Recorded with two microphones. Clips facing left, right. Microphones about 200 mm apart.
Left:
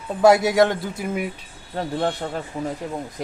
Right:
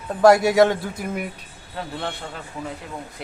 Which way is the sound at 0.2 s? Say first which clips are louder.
Right 1 dB; 5° left (ahead or behind).